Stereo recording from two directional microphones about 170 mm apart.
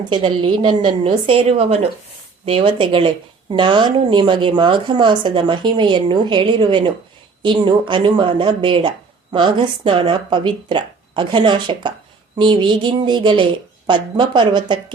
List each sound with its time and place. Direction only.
0.0 s a woman's voice: 30° right (ahead or behind)